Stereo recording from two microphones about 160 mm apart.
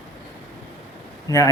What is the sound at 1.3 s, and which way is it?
Speech, 20° left (ahead or behind).